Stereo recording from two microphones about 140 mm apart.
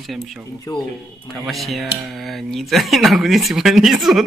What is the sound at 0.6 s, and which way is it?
Speech, 30° left (ahead or behind).